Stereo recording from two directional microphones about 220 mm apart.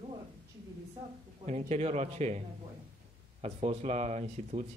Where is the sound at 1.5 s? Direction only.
30° right (ahead or behind).